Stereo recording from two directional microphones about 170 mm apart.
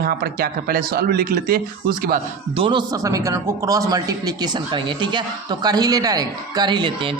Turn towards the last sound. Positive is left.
turn(degrees=-30)  # may be behind; listen again after turning